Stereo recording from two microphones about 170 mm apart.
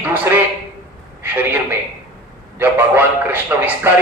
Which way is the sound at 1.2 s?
10° right (ahead or behind).